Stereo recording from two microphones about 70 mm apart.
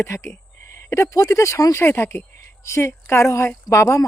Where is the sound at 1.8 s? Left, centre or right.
Left.